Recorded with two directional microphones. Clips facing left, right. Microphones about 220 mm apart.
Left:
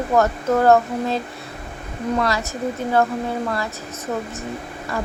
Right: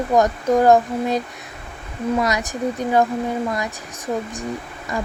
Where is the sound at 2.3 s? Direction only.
15° right (ahead or behind).